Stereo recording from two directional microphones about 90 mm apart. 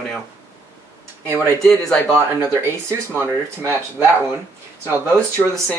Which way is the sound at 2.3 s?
25° right (ahead or behind).